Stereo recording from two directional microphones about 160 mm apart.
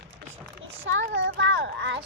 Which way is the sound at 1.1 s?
90° right.